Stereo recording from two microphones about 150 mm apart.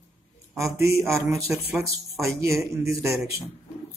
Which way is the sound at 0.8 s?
20° right (ahead or behind).